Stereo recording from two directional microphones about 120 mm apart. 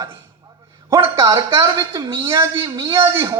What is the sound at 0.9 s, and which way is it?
Speech, 25° right (ahead or behind).